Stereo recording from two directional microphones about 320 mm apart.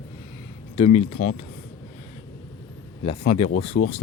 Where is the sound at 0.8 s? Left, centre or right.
Centre.